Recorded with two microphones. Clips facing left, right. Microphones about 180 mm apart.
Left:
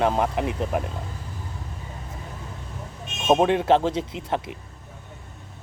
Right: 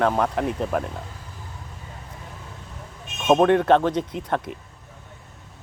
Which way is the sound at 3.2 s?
10° left (ahead or behind).